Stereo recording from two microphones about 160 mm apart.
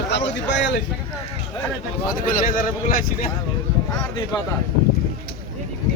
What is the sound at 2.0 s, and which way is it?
Speech, 55° left (ahead or behind).